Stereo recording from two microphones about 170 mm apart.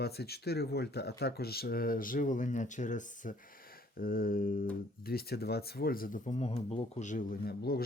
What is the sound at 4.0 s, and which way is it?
Speech, 60° left (ahead or behind).